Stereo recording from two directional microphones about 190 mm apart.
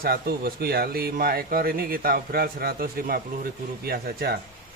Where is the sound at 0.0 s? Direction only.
50° right (ahead or behind).